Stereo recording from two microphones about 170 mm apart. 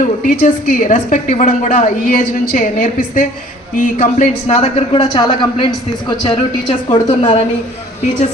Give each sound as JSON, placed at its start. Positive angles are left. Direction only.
{"t": 0.0, "sound": "a woman's voice", "side_deg": 50}
{"t": 4.4, "sound": "a woman's voice", "side_deg": 35}